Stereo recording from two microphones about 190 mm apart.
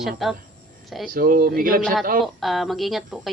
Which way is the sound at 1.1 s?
50° right (ahead or behind).